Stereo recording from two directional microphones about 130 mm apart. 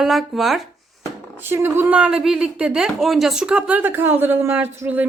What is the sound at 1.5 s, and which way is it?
A woman's voice, 15° right (ahead or behind).